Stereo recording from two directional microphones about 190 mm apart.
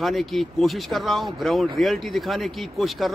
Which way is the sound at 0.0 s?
Centre (ahead or behind).